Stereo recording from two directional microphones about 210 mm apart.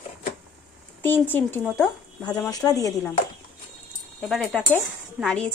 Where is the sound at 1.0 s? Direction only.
10° left (ahead or behind).